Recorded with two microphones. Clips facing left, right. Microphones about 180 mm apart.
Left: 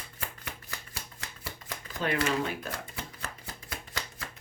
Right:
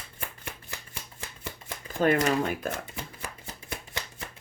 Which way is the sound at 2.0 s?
50° right (ahead or behind).